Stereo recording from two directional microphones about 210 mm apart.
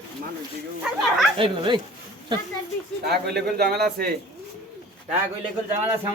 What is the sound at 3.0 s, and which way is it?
Speech, 50° right (ahead or behind).